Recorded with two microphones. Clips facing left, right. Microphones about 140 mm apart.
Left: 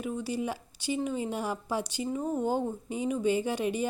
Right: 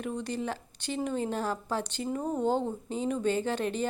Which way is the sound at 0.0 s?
5° left (ahead or behind).